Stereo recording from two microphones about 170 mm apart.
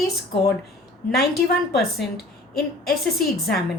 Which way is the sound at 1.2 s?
70° left (ahead or behind).